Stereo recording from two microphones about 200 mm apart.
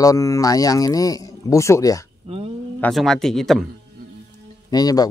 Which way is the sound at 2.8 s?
Centre (ahead or behind).